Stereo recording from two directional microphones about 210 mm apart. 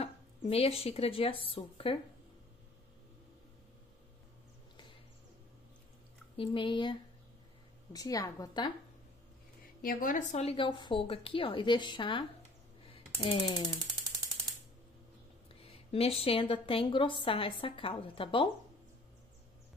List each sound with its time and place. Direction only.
0.0 s speech: 30° left (ahead or behind)
6.3 s a woman's voice: 25° left (ahead or behind)
9.8 s a woman's voice: 40° left (ahead or behind); by 12.3 s 25° left (ahead or behind)
12.8 s typing: 25° left (ahead or behind)
15.6 s a woman's voice: 25° left (ahead or behind)